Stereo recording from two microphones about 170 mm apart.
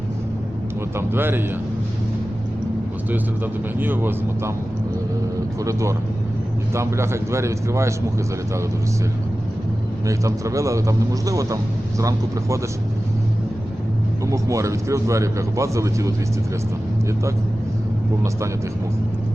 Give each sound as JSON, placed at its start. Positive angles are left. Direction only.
{"t": 0.9, "sound": "a man's voice", "side_deg": -15}
{"t": 3.1, "sound": "a man's voice", "side_deg": -10}
{"t": 5.5, "sound": "a man's voice", "side_deg": -20}
{"t": 10.1, "sound": "speech", "side_deg": -20}
{"t": 14.3, "sound": "a man's voice", "side_deg": -20}